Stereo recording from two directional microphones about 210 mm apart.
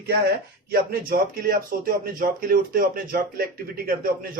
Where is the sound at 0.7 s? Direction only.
45° right (ahead or behind).